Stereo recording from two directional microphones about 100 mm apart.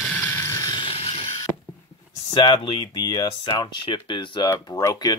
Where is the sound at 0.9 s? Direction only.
75° left (ahead or behind).